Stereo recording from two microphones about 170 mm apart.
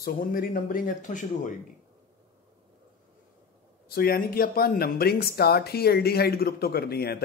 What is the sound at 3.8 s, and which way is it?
Speech, 60° left (ahead or behind).